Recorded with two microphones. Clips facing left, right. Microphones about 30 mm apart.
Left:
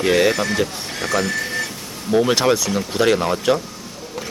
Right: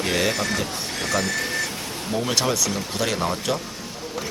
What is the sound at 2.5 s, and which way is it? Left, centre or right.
Speech, centre.